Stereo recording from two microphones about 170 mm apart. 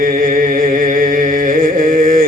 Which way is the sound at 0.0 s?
55° right (ahead or behind).